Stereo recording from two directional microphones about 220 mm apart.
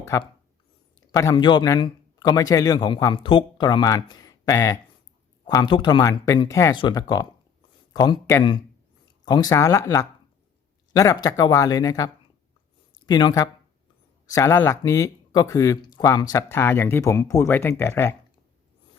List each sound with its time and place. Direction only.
0.0 s a man's voice: 15° left (ahead or behind)